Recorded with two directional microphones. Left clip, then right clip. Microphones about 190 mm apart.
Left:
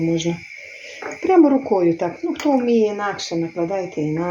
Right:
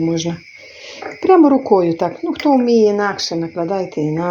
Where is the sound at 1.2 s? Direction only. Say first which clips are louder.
Right 4 dB; 35° right (ahead or behind).